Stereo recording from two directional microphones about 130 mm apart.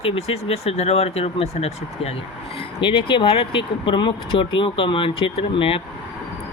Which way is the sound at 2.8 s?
40° left (ahead or behind).